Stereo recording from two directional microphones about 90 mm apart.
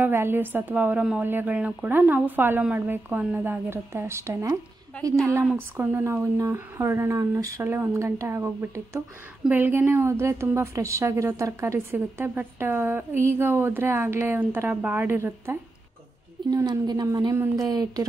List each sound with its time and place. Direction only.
0.0 s a woman's voice: 25° right (ahead or behind)
5.4 s a woman's voice: 20° right (ahead or behind); by 7.6 s 40° right (ahead or behind)
7.6 s a woman's voice: 25° right (ahead or behind)
16.4 s a sound: 55° right (ahead or behind)
16.8 s speech: 50° right (ahead or behind)